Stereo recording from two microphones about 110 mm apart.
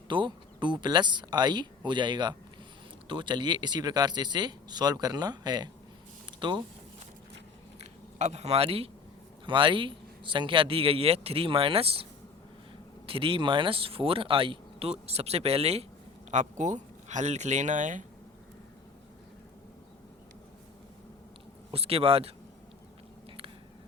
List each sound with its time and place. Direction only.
0.1 s speech: 45° right (ahead or behind)
7.8 s a sound: 80° right; by 8.9 s 60° right (ahead or behind)
9.5 s speech: 50° right (ahead or behind)
13.1 s speech: 55° right (ahead or behind)
16.3 s speech: 90° right
21.7 s speech: 60° right (ahead or behind)